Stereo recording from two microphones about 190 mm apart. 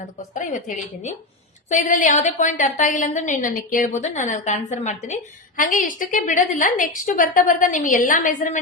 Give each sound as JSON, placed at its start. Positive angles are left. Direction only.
{"t": 1.7, "sound": "a woman's voice", "side_deg": 40}